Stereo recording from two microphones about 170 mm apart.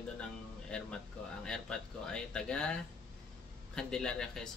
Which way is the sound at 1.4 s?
5° left (ahead or behind).